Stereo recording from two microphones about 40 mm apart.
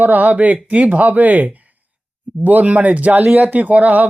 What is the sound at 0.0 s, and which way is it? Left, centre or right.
Speech, right.